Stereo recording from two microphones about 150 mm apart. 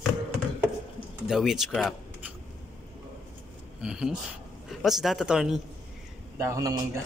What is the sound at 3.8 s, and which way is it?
Speech, 5° right (ahead or behind).